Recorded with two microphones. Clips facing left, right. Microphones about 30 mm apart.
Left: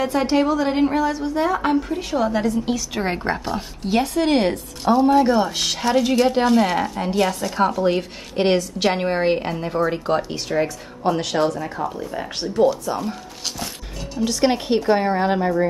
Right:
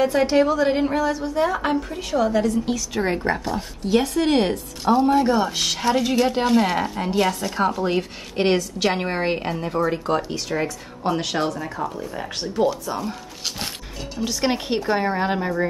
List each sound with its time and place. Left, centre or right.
0.0 s a woman's voice: centre; by 4.0 s left
4.0 s a woman's voice: centre
10.6 s a woman's voice: centre
11.9 s speech: centre
12.5 s a woman's voice: centre
14.2 s a woman's voice: centre